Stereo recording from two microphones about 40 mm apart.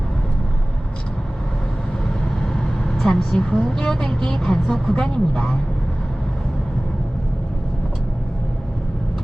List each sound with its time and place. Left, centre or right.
2.4 s a woman's voice: centre